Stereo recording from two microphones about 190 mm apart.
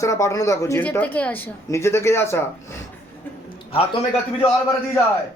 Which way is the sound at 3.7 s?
30° left (ahead or behind).